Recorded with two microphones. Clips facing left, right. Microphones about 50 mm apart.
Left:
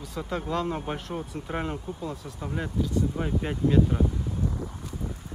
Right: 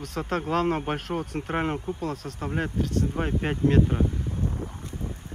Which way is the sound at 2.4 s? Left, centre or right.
Right.